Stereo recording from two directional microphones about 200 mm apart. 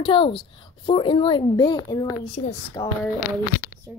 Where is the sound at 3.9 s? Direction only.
10° right (ahead or behind).